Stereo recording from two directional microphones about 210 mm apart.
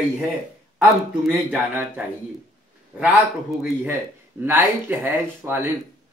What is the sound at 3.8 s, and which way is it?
Speech, 10° right (ahead or behind).